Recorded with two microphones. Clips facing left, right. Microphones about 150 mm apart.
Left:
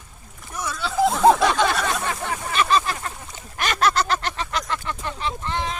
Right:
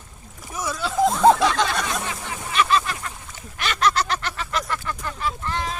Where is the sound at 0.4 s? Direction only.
5° right (ahead or behind).